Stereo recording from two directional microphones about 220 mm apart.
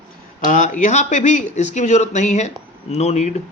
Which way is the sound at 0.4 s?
35° left (ahead or behind).